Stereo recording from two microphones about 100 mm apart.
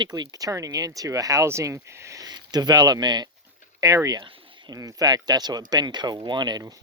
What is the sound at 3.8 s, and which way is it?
Speech, 35° right (ahead or behind).